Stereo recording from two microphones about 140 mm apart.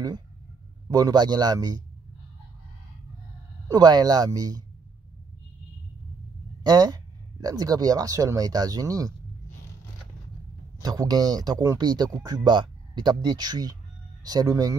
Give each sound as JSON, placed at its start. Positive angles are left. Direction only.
{"t": 0.8, "sound": "speech", "side_deg": -30}
{"t": 3.6, "sound": "speech", "side_deg": -30}
{"t": 6.6, "sound": "speech", "side_deg": -30}
{"t": 10.8, "sound": "speech", "side_deg": -25}